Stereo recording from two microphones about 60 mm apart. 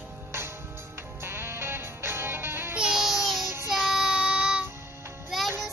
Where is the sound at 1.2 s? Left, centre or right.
Right.